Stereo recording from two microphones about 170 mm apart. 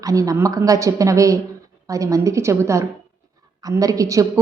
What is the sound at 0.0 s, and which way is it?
A woman's voice, 20° right (ahead or behind).